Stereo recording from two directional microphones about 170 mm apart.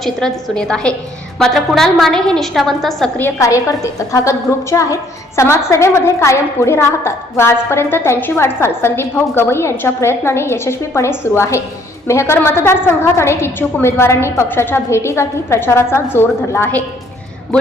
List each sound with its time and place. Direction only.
0.0 s a woman's voice: centre (ahead or behind)